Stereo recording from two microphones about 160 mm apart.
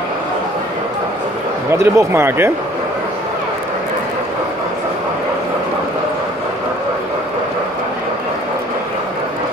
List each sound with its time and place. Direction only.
1.7 s speech: 15° right (ahead or behind)